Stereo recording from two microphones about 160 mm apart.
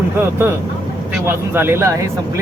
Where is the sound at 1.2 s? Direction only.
15° right (ahead or behind).